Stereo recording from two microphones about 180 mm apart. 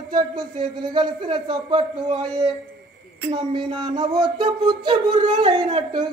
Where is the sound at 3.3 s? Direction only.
25° right (ahead or behind).